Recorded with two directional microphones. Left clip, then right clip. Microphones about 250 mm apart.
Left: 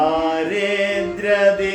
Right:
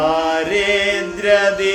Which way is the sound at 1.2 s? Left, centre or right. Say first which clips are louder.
Right 2 dB; centre.